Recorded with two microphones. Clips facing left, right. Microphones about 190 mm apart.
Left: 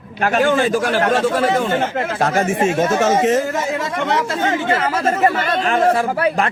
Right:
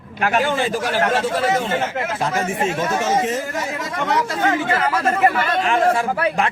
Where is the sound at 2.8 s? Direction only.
45° left (ahead or behind).